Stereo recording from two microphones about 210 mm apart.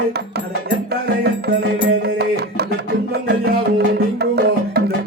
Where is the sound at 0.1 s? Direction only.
50° right (ahead or behind).